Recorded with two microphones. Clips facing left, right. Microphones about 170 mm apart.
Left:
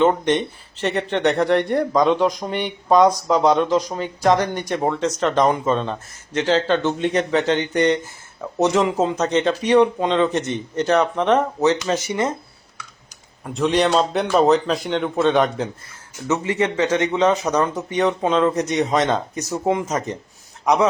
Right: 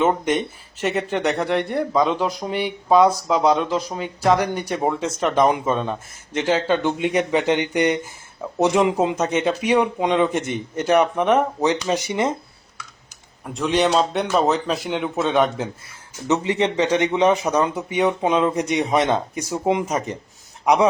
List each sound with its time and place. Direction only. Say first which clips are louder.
0.0 s speech: left 2 dB; 5° right (ahead or behind)
13.6 s speech: left 1 dB; centre (ahead or behind)
16.2 s speech: right 1 dB; 20° right (ahead or behind)